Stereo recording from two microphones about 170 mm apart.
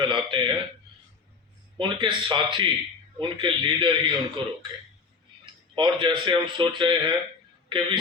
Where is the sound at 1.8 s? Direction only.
30° right (ahead or behind).